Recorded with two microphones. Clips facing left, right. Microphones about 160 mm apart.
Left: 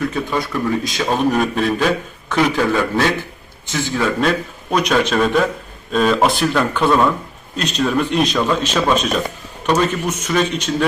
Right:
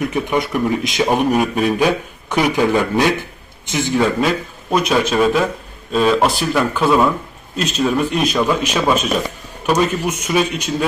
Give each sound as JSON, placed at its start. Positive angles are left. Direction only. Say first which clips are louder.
{"t": 0.0, "sound": "a man's voice", "louder": "right 2 dB", "side_deg": -20}
{"t": 4.2, "sound": "a man's voice", "louder": "even", "side_deg": -5}